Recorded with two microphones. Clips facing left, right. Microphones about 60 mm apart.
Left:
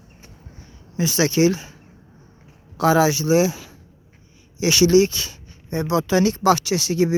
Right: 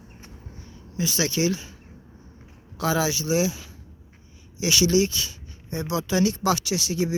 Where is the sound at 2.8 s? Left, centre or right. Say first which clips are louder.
Left 7 dB; left.